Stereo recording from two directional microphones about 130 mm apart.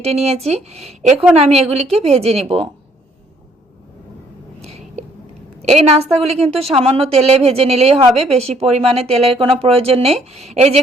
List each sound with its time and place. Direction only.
0.0 s speech: 50° right (ahead or behind)
4.6 s a sound: 55° right (ahead or behind)
5.6 s speech: 55° right (ahead or behind)